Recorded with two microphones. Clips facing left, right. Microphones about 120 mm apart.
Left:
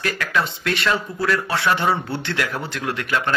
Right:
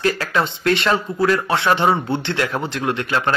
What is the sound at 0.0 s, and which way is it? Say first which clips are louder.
Speech: right 3 dB; 30° right (ahead or behind).